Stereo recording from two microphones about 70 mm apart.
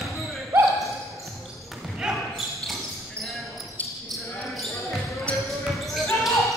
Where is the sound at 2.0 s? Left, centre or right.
Centre.